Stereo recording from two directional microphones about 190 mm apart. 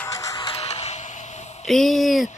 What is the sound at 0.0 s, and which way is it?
Music, 20° left (ahead or behind).